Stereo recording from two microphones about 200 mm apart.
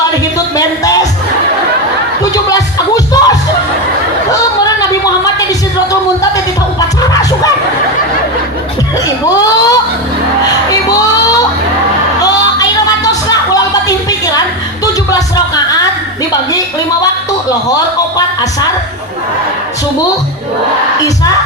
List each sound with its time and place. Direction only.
0.5 s music: 20° left (ahead or behind)
2.3 s music: 20° left (ahead or behind)
4.3 s a sound: 20° left (ahead or behind)
6.7 s music: 20° left (ahead or behind)
9.3 s a sound: 20° left (ahead or behind)
10.4 s music: 20° left (ahead or behind)